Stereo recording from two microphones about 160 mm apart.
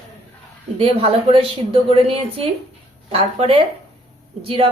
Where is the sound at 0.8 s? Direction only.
35° right (ahead or behind).